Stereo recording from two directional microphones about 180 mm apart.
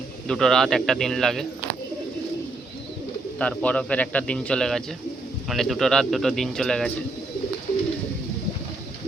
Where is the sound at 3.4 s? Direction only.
5° left (ahead or behind).